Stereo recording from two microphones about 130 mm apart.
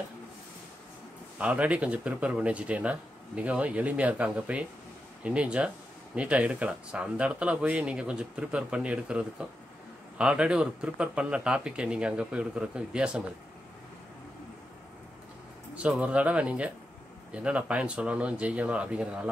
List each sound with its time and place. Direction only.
1.4 s speech: 10° right (ahead or behind)
15.7 s speech: 10° right (ahead or behind)